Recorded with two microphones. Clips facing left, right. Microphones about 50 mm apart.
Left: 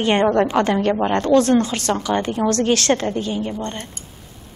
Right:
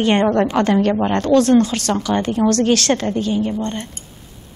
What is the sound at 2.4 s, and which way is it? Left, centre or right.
Speech, centre.